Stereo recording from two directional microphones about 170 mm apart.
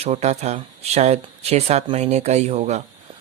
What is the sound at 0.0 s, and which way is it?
Speech, 40° right (ahead or behind).